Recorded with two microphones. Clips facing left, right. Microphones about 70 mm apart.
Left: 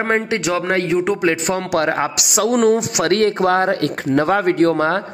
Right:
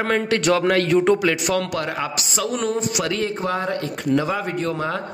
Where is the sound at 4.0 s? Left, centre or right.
Left.